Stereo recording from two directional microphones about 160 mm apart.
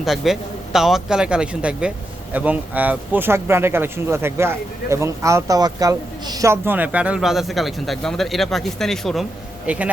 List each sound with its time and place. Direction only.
0.0 s a man's voice: centre (ahead or behind)